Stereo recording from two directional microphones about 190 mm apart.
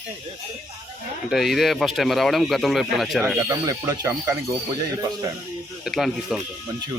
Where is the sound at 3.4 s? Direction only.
15° right (ahead or behind).